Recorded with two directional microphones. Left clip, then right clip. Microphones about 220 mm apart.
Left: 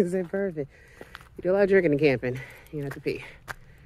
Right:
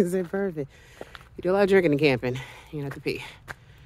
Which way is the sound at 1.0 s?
45° left (ahead or behind).